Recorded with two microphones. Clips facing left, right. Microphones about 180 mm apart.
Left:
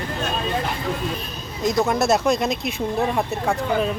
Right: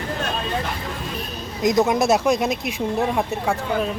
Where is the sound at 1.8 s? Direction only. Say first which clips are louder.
Even; 10° right (ahead or behind).